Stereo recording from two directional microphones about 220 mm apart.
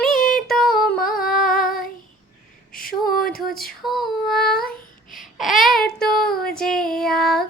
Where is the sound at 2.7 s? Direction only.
40° left (ahead or behind).